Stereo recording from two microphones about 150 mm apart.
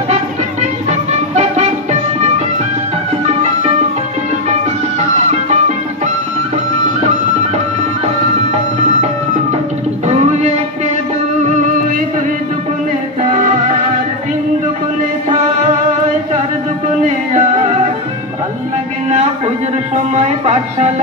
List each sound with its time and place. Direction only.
0.1 s music: 50° right (ahead or behind)
10.0 s music: 50° right (ahead or behind)
17.0 s music: 55° right (ahead or behind)
19.0 s music: 50° right (ahead or behind)